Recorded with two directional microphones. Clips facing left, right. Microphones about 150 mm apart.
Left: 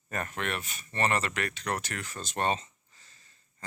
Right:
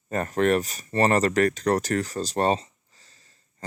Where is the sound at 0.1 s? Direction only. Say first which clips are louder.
Right 12 dB; 35° right (ahead or behind).